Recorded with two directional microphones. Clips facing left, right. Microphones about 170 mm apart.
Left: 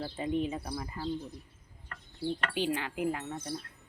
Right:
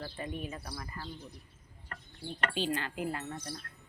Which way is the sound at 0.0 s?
20° left (ahead or behind).